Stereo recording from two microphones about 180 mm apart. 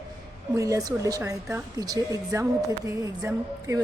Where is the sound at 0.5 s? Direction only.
20° right (ahead or behind).